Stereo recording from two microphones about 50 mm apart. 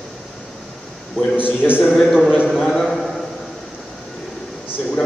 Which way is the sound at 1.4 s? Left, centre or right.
Left.